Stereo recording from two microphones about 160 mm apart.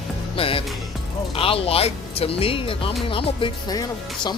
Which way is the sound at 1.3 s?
35° left (ahead or behind).